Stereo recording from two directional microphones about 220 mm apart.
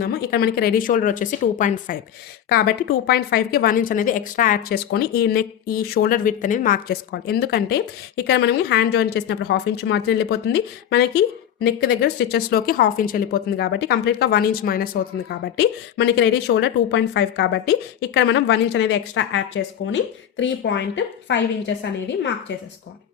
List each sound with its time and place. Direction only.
0.0 s a woman's voice: 45° left (ahead or behind)